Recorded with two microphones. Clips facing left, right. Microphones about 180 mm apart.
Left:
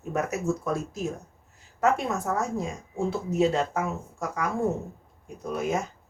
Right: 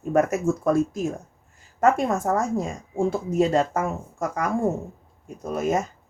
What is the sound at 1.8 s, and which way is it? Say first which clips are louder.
Speech: right 4 dB; 50° right (ahead or behind).